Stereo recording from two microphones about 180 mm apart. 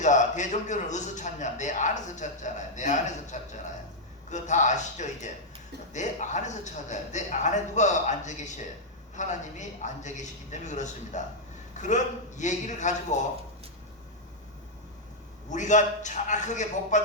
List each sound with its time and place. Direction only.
0.0 s a man's voice: 40° left (ahead or behind)
15.4 s a man's voice: 40° left (ahead or behind)